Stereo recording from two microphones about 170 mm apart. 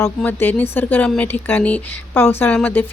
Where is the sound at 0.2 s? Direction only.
10° left (ahead or behind).